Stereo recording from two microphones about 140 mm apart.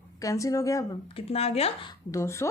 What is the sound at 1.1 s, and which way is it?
Speech, 45° left (ahead or behind).